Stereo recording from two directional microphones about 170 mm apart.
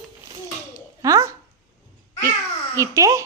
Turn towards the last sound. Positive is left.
turn(degrees=-20)  # may be behind; listen again after turning